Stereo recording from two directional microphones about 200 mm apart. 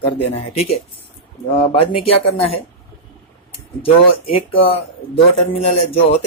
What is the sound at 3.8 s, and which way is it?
Speech, 30° left (ahead or behind).